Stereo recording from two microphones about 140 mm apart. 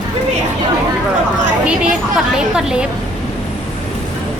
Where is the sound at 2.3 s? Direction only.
5° right (ahead or behind).